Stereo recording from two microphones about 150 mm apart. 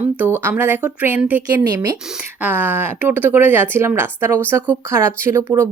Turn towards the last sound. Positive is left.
turn(degrees=-20)  # may be behind; listen again after turning